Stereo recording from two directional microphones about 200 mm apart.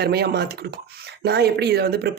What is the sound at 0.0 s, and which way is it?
Speech, 55° right (ahead or behind).